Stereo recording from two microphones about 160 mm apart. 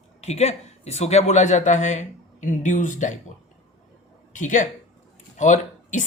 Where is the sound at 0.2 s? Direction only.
40° left (ahead or behind).